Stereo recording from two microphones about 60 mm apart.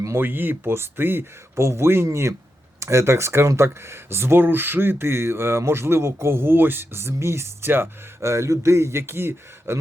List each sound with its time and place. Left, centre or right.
0.2 s speech: right
8.2 s speech: right